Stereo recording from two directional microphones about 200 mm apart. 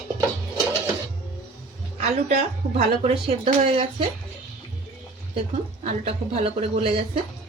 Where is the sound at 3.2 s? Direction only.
30° right (ahead or behind).